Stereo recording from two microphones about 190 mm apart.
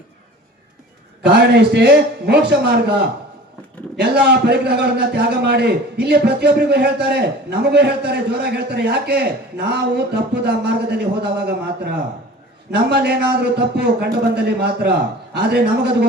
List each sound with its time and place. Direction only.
1.2 s a man's voice: 60° right (ahead or behind)